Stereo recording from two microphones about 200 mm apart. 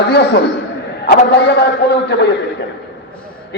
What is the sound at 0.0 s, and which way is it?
A man's voice, 60° left (ahead or behind).